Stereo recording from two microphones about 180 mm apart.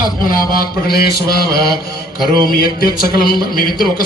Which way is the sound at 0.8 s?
60° left (ahead or behind).